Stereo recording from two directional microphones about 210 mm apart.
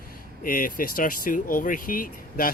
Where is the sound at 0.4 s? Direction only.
40° left (ahead or behind).